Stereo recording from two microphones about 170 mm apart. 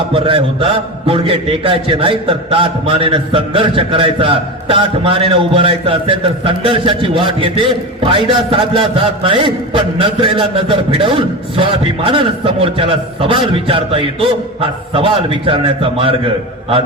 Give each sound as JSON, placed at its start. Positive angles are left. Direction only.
{"t": 0.1, "sound": "a man's voice", "side_deg": -30}